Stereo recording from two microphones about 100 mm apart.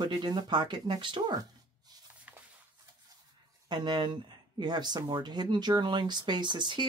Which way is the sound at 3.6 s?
45° right (ahead or behind).